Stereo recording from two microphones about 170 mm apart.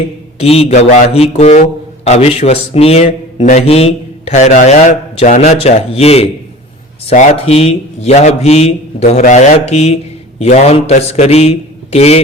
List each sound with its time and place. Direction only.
0.3 s a man's voice: 35° left (ahead or behind)